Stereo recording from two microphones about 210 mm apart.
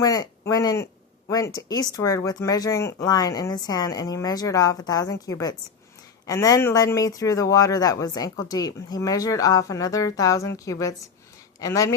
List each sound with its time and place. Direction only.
0.0 s speech: 15° left (ahead or behind)